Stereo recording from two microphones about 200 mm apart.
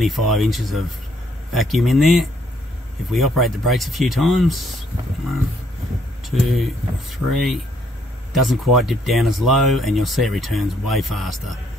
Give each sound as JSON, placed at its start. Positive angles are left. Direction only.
{"t": 0.0, "sound": "speech", "side_deg": 0}
{"t": 6.5, "sound": "speech", "side_deg": 0}